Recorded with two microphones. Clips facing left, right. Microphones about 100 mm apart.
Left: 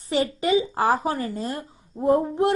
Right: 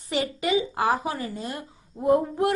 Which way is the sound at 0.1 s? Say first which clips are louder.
Left 3 dB; 30° left (ahead or behind).